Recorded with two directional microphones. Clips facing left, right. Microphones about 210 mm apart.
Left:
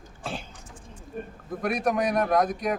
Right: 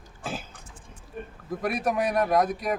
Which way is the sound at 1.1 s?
45° left (ahead or behind).